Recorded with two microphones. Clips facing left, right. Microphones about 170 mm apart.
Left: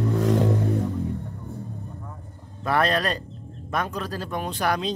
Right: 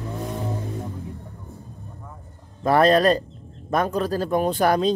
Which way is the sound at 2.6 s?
40° right (ahead or behind).